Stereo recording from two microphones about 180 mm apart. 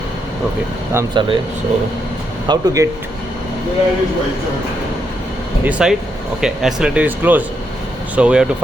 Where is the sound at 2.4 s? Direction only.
20° right (ahead or behind).